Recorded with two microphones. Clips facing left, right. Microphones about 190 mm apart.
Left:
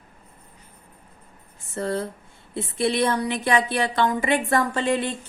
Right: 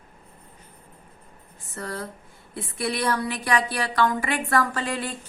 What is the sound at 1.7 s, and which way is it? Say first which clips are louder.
A woman's voice: left 7 dB; 25° left (ahead or behind).